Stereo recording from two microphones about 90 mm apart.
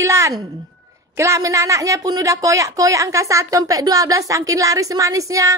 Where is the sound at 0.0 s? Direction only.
35° right (ahead or behind).